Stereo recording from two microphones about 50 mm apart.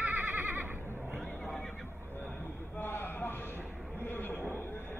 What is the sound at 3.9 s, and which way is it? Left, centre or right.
Vehicle, left.